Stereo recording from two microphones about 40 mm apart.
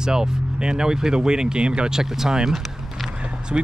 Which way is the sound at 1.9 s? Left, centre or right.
Centre.